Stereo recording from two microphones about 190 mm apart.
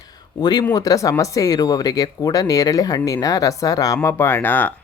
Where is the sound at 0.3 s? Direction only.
20° left (ahead or behind).